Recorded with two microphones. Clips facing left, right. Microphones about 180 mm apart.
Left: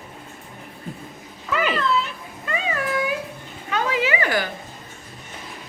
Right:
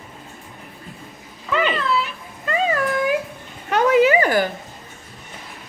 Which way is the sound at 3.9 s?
40° right (ahead or behind).